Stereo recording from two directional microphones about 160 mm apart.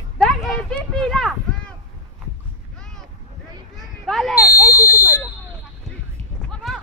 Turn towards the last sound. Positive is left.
turn(degrees=0)  # may be behind; listen again after turning